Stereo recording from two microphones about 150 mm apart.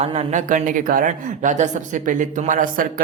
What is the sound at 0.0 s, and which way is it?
Speech, 45° right (ahead or behind).